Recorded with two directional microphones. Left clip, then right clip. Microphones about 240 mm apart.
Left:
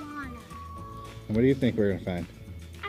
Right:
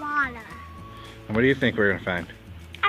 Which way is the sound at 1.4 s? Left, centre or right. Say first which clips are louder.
Right 4 dB; right.